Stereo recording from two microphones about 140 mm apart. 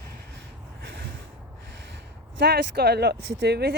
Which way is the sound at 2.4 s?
90° right.